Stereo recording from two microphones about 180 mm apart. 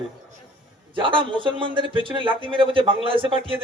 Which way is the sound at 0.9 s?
30° right (ahead or behind).